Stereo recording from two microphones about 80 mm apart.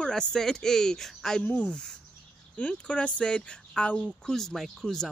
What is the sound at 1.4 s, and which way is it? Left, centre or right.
Speech, centre.